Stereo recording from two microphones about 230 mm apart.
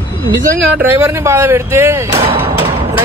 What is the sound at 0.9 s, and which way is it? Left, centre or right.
Speech, centre.